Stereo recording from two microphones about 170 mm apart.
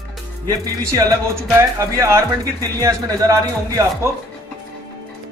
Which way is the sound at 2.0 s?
20° right (ahead or behind).